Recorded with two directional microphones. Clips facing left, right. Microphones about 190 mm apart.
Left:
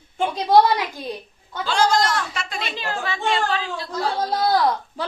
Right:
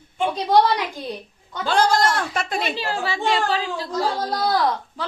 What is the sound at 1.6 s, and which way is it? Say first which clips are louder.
Speech: right 1 dB; 55° right (ahead or behind).